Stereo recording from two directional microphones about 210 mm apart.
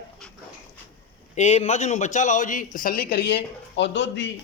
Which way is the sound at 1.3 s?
35° left (ahead or behind).